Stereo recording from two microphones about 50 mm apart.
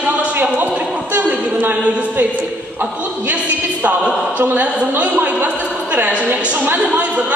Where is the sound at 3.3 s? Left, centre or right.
Right.